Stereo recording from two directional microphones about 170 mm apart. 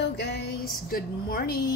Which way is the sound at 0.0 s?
75° left (ahead or behind).